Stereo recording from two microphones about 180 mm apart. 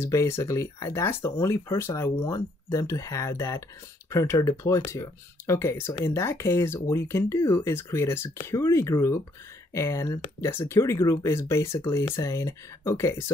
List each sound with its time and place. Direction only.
0.0 s speech: 15° left (ahead or behind)